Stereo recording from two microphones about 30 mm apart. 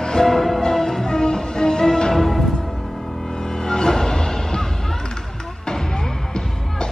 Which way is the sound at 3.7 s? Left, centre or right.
Centre.